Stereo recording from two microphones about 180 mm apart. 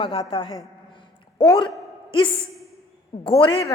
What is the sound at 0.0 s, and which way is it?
Speech, 30° left (ahead or behind).